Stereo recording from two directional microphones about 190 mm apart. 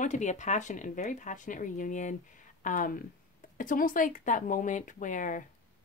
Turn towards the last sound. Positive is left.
turn(degrees=45)  # may be behind; listen again after turning